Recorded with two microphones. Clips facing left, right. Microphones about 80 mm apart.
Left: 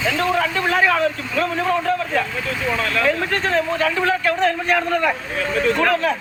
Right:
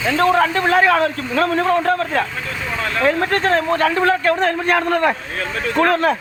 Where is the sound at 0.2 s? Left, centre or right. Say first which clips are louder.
Right 8 dB; right.